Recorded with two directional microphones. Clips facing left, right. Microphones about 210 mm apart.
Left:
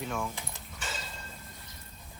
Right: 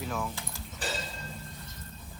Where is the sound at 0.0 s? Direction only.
Centre (ahead or behind).